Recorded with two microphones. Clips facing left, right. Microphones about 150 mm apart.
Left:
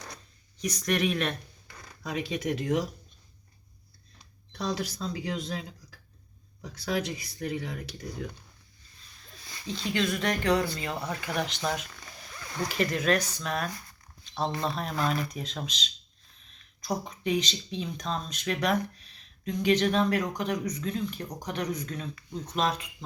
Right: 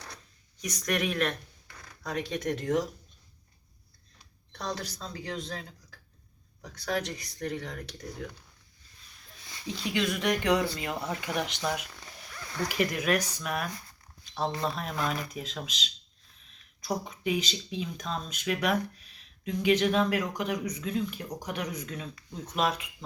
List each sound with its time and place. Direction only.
0.6 s speech: centre (ahead or behind)
4.5 s speech: 10° left (ahead or behind)
9.6 s speech: 10° right (ahead or behind)